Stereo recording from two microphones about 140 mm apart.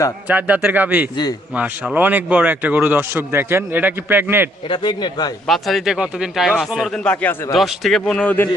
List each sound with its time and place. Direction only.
0.3 s speech: 10° right (ahead or behind)
4.7 s speech: 35° left (ahead or behind)
5.5 s speech: centre (ahead or behind)